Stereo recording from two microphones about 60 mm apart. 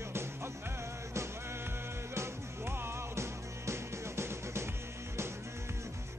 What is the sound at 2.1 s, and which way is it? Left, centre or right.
Music, right.